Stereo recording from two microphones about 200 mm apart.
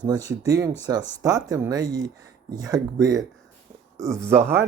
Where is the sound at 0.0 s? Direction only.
20° right (ahead or behind).